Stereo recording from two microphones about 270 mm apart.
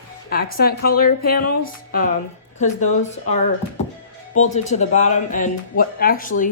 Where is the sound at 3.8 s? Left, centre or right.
Left.